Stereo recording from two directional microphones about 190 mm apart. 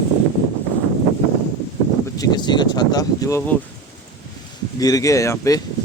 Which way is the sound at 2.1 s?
20° left (ahead or behind).